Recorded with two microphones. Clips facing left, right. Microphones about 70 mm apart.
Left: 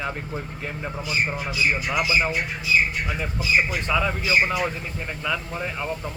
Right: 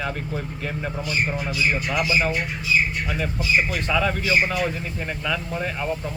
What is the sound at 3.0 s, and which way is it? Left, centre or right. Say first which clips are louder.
Speech: right 2 dB; centre.